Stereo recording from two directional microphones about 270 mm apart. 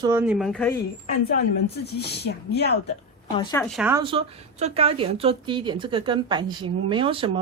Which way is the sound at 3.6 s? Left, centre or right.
Centre.